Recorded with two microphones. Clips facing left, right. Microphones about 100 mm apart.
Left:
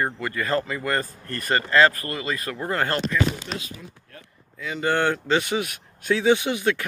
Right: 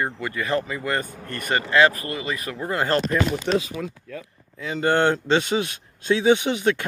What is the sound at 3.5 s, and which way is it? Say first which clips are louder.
Speech: right 11 dB; 80° right.